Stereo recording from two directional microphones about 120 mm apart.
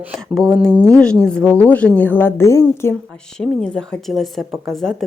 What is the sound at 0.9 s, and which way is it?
A woman's voice, 5° left (ahead or behind).